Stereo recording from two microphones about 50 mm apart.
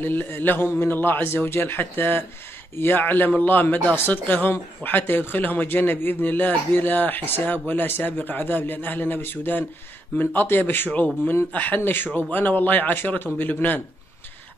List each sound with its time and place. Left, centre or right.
0.0 s a man's voice: left